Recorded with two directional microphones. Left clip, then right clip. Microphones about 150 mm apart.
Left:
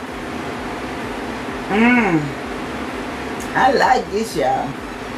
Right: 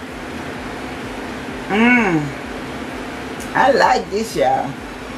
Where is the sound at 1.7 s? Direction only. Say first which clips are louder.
Right 1 dB; centre (ahead or behind).